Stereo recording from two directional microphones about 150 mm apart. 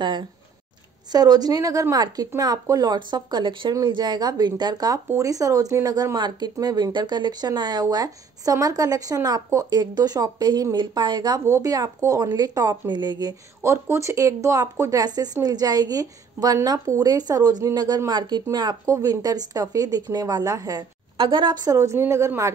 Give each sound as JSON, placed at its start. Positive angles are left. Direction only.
{"t": 0.0, "sound": "speech", "side_deg": -30}
{"t": 13.6, "sound": "speech", "side_deg": -20}